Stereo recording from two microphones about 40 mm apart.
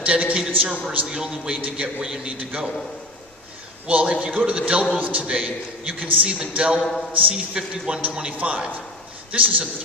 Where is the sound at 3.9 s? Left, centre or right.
Right.